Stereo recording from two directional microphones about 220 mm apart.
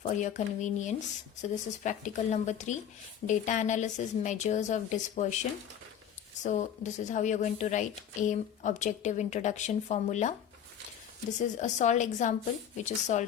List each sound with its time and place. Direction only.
0.1 s a woman's voice: 35° left (ahead or behind)
11.3 s a woman's voice: 35° left (ahead or behind)